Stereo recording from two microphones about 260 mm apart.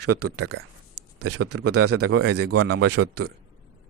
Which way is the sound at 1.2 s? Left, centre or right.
Right.